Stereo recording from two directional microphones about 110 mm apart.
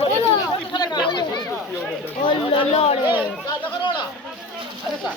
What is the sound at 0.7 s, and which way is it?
Chatter, 40° left (ahead or behind).